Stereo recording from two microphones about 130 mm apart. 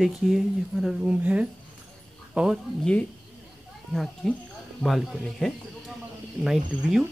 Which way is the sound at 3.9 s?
Centre (ahead or behind).